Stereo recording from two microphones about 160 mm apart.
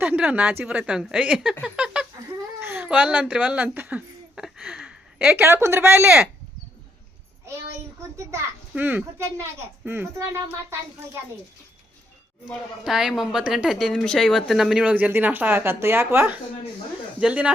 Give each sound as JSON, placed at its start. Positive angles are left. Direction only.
{"t": 0.0, "sound": "a woman's voice", "side_deg": -10}
{"t": 7.9, "sound": "a child's voice", "side_deg": -15}
{"t": 12.8, "sound": "a woman's voice", "side_deg": -5}